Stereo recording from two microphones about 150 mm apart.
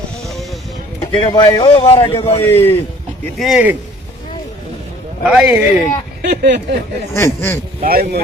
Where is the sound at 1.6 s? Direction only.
40° left (ahead or behind).